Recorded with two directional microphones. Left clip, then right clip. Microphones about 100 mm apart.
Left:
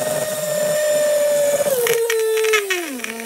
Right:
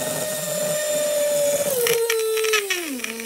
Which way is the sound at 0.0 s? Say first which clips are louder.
Left 5 dB; 15° left (ahead or behind).